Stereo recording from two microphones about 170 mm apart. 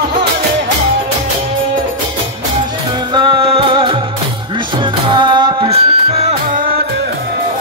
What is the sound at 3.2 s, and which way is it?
Music, 30° right (ahead or behind).